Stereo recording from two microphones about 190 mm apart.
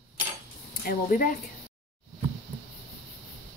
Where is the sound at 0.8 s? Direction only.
50° left (ahead or behind).